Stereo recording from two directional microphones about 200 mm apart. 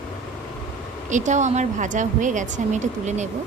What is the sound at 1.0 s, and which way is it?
A woman's voice, 35° right (ahead or behind).